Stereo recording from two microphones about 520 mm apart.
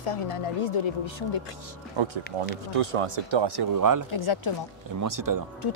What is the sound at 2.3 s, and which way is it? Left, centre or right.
Speech, right.